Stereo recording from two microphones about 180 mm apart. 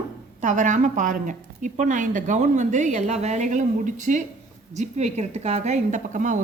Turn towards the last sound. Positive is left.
turn(degrees=-45)  # may be behind; listen again after turning